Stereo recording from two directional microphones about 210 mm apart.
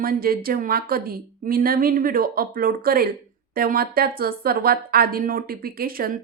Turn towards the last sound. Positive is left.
turn(degrees=-45)  # may be behind; listen again after turning